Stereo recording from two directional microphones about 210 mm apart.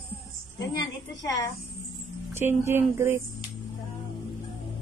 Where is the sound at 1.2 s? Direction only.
15° left (ahead or behind).